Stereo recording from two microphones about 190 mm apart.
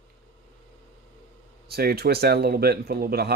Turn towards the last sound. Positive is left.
turn(degrees=-55)  # may be behind; listen again after turning